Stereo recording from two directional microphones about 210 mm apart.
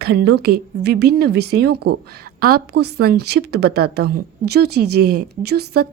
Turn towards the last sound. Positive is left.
turn(degrees=-50)  # may be behind; listen again after turning